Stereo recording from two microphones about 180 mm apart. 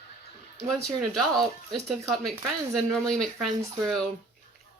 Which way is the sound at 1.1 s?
Centre (ahead or behind).